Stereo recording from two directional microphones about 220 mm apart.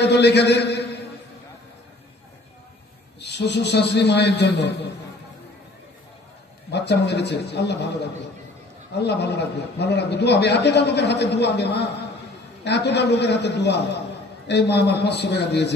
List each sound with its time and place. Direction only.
0.0 s a man's voice: 50° left (ahead or behind)
3.2 s a man's voice: 50° left (ahead or behind)
6.7 s a man's voice: 50° left (ahead or behind)